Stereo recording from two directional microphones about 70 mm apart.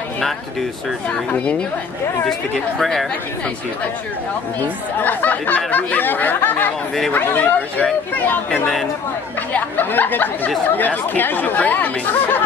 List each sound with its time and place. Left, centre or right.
1.3 s speech: centre
2.8 s speech: centre
4.6 s speech: left
8.5 s speech: centre
9.5 s speech: left